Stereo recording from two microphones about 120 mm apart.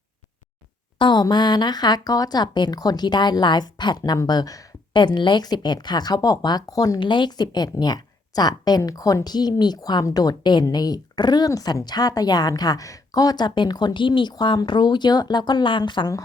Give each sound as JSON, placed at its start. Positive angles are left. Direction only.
{"t": 0.9, "sound": "speech", "side_deg": 40}